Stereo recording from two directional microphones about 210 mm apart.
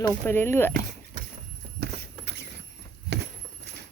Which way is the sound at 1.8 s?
55° right (ahead or behind).